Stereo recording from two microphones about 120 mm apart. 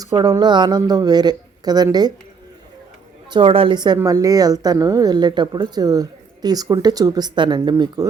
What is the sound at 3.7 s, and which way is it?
A woman's voice, 35° right (ahead or behind).